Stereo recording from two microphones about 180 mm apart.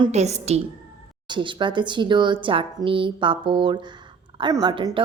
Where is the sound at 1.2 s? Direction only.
25° right (ahead or behind).